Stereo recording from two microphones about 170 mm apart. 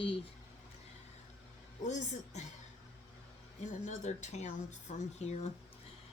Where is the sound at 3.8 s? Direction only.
45° left (ahead or behind).